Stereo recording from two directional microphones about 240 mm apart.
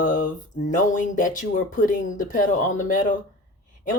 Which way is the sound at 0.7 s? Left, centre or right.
Left.